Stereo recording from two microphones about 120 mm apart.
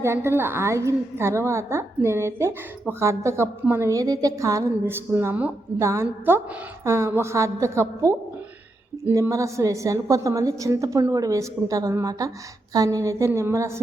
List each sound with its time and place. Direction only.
0.0 s a woman's voice: 20° right (ahead or behind)
9.1 s a woman's voice: 25° right (ahead or behind)